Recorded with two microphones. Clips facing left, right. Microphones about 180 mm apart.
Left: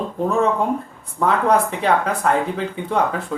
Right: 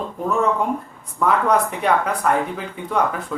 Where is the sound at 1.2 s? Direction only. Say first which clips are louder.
Left 1 dB; 30° left (ahead or behind).